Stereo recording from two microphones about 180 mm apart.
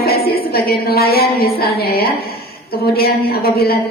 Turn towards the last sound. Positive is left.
turn(degrees=60)  # may be behind; listen again after turning